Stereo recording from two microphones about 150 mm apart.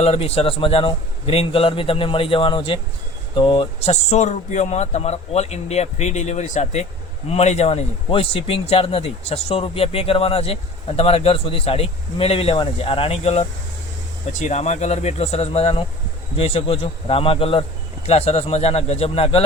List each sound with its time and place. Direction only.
0.0 s a man's voice: 40° left (ahead or behind)